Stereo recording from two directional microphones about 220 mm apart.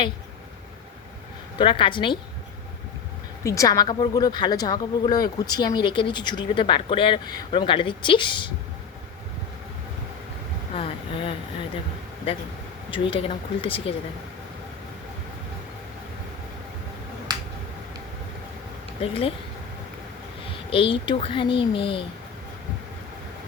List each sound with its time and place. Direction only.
1.5 s speech: 20° left (ahead or behind)
3.4 s speech: 15° left (ahead or behind)
10.8 s a sound: 25° left (ahead or behind)
12.9 s speech: 25° left (ahead or behind)
19.0 s speech: 25° left (ahead or behind)
20.7 s speech: 25° left (ahead or behind)